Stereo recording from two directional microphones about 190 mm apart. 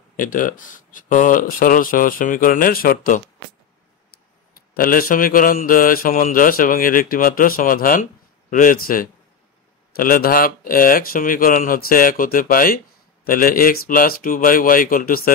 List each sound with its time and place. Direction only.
0.2 s speech: 45° left (ahead or behind)
4.7 s speech: 50° left (ahead or behind)